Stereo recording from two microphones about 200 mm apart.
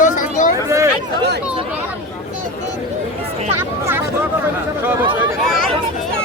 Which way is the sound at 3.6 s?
10° right (ahead or behind).